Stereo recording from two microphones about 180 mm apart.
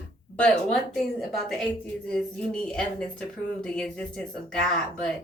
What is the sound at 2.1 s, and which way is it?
Speech, 5° left (ahead or behind).